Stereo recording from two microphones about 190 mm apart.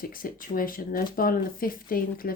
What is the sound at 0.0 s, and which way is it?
Speech, 45° left (ahead or behind).